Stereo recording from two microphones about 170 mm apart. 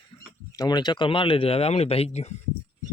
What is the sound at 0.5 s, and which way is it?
Speech, 20° left (ahead or behind).